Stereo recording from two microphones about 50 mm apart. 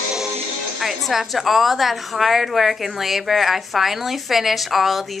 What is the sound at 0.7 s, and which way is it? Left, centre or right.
A woman's voice, centre.